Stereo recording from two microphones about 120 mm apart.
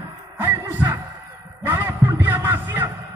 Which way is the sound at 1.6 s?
20° right (ahead or behind).